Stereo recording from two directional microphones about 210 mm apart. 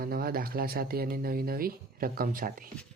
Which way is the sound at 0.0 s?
45° right (ahead or behind).